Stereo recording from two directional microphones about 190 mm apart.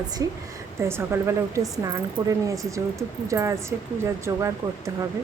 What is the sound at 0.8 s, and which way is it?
A woman's voice, 15° right (ahead or behind).